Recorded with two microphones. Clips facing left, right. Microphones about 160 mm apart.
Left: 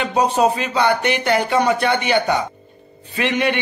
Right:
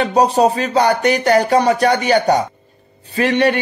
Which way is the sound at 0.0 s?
40° right (ahead or behind).